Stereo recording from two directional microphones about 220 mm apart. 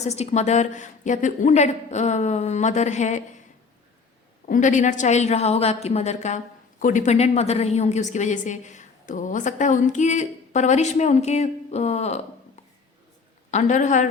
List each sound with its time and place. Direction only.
0.0 s a woman's voice: 30° left (ahead or behind)
4.4 s a woman's voice: 35° left (ahead or behind)
13.5 s a woman's voice: 35° left (ahead or behind)